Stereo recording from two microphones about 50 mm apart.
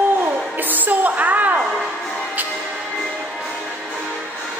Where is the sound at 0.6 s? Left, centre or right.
Right.